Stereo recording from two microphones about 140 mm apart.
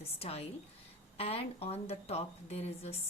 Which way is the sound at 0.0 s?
45° left (ahead or behind).